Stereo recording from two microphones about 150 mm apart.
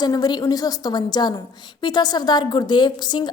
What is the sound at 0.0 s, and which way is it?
A woman's voice, 25° left (ahead or behind).